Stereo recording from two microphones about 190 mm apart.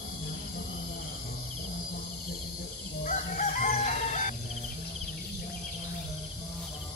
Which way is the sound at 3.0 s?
40° left (ahead or behind).